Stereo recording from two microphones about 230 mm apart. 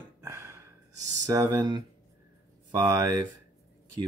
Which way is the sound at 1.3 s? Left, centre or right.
Centre.